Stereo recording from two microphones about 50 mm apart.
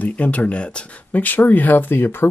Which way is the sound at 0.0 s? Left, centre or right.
Left.